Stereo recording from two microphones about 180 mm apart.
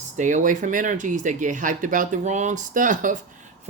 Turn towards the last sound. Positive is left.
turn(degrees=-45)  # may be behind; listen again after turning